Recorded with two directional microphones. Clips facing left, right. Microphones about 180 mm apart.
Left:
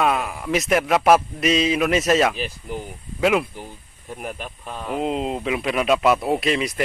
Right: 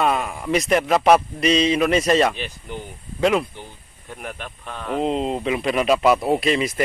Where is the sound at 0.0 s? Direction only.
Centre (ahead or behind).